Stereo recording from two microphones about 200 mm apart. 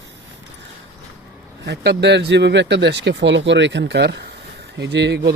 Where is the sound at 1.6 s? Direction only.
55° right (ahead or behind).